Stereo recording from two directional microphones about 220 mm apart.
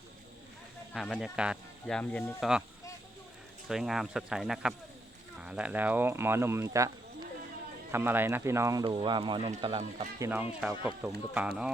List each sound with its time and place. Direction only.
0.9 s speech: centre (ahead or behind)
3.7 s speech: centre (ahead or behind)